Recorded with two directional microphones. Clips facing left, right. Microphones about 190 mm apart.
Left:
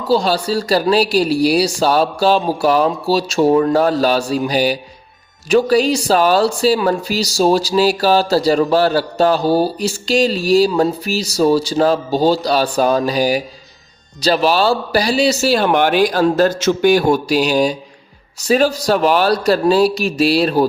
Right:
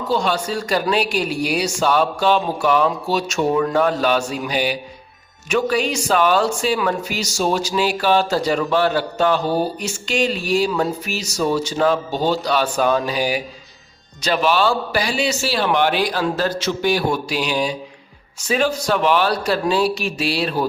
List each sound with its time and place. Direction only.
0.1 s speech: 35° left (ahead or behind)